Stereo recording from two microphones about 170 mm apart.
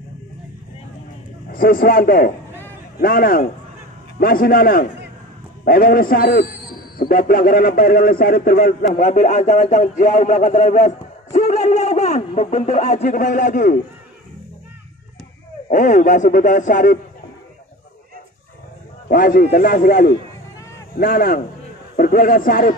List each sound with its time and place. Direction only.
1.5 s a man's voice: 60° left (ahead or behind)
9.0 s speech: 45° left (ahead or behind)
15.7 s a man's voice: 50° left (ahead or behind)
19.0 s a man's voice: 55° left (ahead or behind)